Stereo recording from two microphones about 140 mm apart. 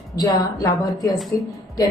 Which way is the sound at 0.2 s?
25° left (ahead or behind).